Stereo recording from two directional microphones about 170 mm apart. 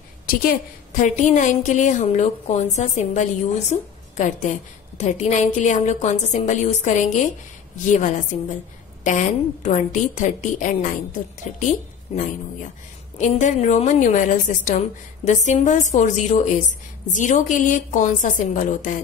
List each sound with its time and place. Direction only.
0.3 s a woman's voice: 55° left (ahead or behind)
13.2 s a woman's voice: 45° left (ahead or behind)